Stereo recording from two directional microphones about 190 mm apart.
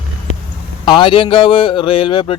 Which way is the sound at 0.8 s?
25° left (ahead or behind).